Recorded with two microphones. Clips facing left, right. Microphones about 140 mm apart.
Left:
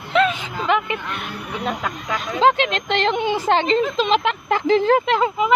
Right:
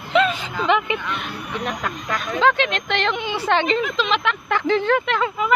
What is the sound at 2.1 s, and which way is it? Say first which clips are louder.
Speech: left 2 dB; 30° left (ahead or behind).